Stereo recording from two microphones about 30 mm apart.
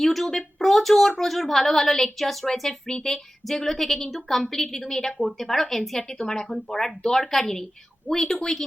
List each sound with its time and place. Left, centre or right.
0.0 s a woman's voice: centre
2.8 s a woman's voice: centre
6.0 s a woman's voice: left